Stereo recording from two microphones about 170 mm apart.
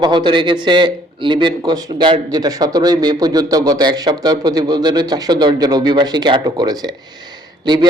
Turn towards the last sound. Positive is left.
turn(degrees=-25)  # may be behind; listen again after turning